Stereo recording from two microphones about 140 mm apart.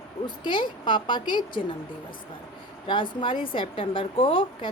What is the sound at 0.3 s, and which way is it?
A woman's voice, 35° left (ahead or behind).